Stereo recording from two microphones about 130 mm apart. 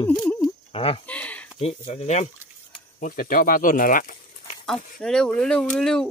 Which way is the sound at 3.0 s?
90° left.